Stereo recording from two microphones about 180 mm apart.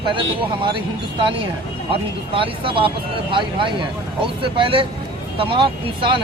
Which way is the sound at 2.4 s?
30° right (ahead or behind).